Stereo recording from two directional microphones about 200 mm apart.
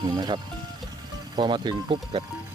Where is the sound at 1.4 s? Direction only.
20° right (ahead or behind).